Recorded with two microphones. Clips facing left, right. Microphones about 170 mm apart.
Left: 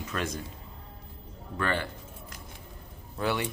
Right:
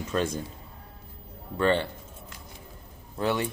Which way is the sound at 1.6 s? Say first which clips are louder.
Right 6 dB; 30° right (ahead or behind).